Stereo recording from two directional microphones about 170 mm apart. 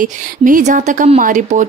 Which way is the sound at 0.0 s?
50° right (ahead or behind).